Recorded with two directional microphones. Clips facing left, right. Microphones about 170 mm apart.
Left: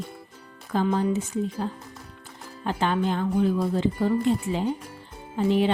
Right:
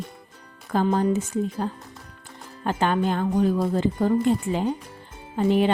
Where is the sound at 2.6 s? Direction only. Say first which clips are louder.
Right 2 dB; 50° right (ahead or behind).